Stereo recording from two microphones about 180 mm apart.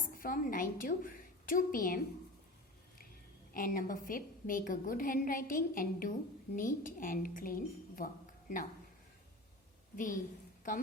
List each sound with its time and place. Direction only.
0.0 s a woman's voice: 50° left (ahead or behind)
3.5 s a woman's voice: 50° left (ahead or behind)
9.9 s a woman's voice: 50° left (ahead or behind)